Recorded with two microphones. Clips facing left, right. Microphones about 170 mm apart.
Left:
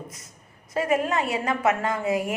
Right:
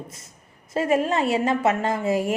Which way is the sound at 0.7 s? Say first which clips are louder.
Right 2 dB; 25° right (ahead or behind).